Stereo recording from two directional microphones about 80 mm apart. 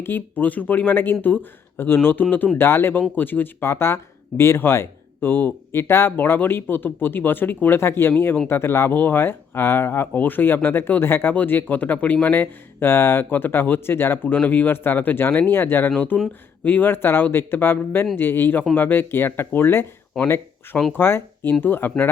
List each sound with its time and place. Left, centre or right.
0.0 s speech: left
20.9 s speech: left